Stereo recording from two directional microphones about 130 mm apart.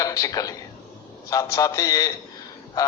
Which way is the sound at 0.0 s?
30° left (ahead or behind).